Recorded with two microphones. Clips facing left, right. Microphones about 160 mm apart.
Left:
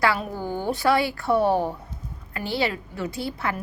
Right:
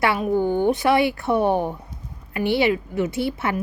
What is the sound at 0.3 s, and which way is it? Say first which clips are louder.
A woman's voice: right 8 dB; 20° right (ahead or behind).